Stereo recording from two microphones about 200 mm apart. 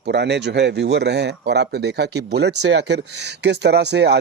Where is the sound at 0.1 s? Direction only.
55° right (ahead or behind).